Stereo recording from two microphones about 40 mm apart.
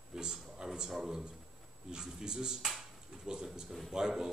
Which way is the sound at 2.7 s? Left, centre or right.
Centre.